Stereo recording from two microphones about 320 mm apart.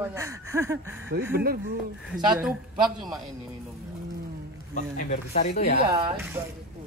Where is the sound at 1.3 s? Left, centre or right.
Right.